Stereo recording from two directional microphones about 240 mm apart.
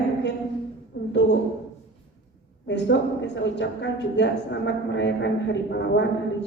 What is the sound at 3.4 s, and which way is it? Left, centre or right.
A woman's voice, left.